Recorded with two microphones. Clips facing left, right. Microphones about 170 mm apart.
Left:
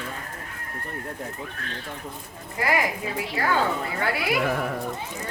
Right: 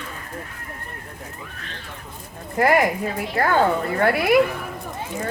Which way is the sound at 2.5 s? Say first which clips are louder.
Right 7 dB; 55° right (ahead or behind).